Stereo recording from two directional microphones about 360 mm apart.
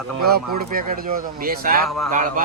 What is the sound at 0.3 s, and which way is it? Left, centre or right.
A man's voice, right.